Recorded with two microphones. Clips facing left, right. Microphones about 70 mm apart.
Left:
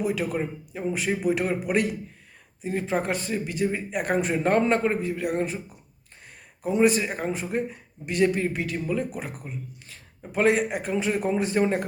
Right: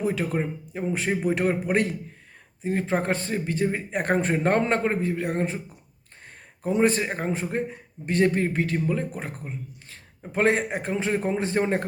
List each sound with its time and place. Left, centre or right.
0.0 s a man's voice: right
6.6 s a man's voice: right